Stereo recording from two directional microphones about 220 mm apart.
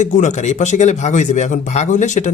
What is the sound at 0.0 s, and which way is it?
Speech, 35° left (ahead or behind).